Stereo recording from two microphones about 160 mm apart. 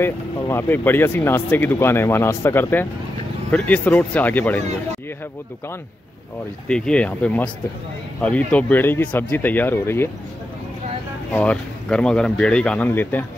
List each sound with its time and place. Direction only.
0.0 s speech: 15° left (ahead or behind)
6.7 s speech: 5° left (ahead or behind)
11.3 s speech: 5° left (ahead or behind)